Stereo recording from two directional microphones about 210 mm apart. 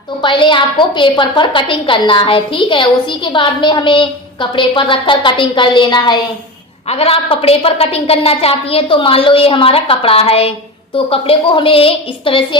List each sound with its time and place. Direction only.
0.2 s a woman's voice: 25° left (ahead or behind)